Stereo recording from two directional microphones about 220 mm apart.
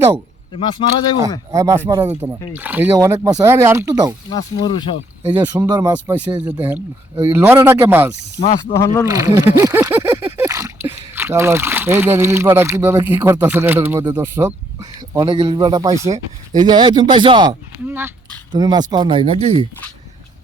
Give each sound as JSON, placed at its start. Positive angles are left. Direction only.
{"t": 0.6, "sound": "speech", "side_deg": 20}
{"t": 1.5, "sound": "speech", "side_deg": -10}
{"t": 4.3, "sound": "speech", "side_deg": 20}
{"t": 5.2, "sound": "speech", "side_deg": -10}
{"t": 8.7, "sound": "speech", "side_deg": 15}
{"t": 9.0, "sound": "speech", "side_deg": -15}
{"t": 17.8, "sound": "speech", "side_deg": -10}